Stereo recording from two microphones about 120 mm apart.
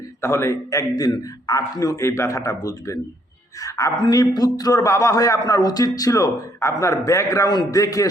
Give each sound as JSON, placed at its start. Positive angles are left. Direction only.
{"t": 0.2, "sound": "a man's voice", "side_deg": 20}